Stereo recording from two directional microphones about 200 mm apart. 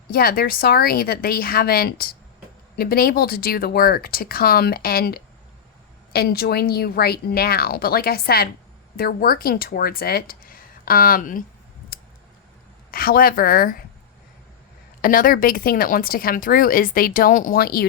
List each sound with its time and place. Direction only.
0.1 s speech: 50° left (ahead or behind)
12.9 s speech: 45° left (ahead or behind)
15.0 s speech: 45° left (ahead or behind)